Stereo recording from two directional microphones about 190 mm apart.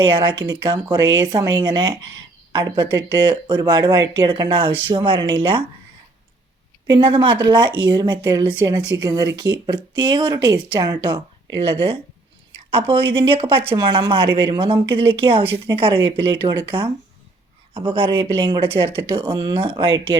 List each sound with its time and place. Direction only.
0.0 s speech: 25° right (ahead or behind)
7.0 s speech: 25° right (ahead or behind)
17.7 s speech: 30° right (ahead or behind)